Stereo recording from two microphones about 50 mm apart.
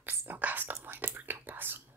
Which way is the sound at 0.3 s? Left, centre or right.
Right.